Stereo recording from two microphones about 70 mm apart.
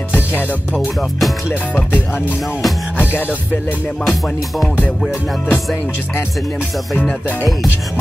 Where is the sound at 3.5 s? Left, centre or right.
Left.